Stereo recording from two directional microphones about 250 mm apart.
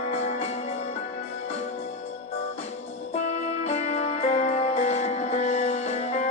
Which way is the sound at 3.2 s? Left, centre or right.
Left.